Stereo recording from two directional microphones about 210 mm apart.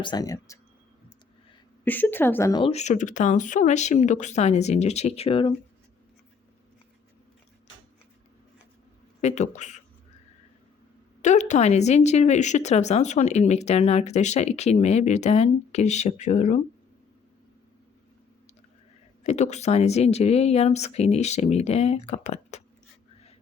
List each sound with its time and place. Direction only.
0.0 s speech: 20° left (ahead or behind)
1.8 s speech: 10° left (ahead or behind); by 5.5 s 25° left (ahead or behind)
9.2 s speech: 35° left (ahead or behind)
11.2 s speech: 35° left (ahead or behind)
19.2 s speech: 35° left (ahead or behind)